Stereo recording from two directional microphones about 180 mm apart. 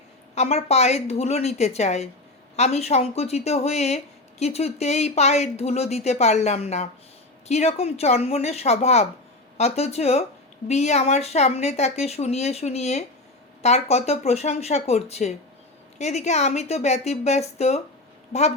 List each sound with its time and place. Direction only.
0.3 s speech: 35° left (ahead or behind)